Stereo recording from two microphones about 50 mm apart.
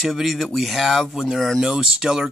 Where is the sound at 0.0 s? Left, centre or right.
Centre.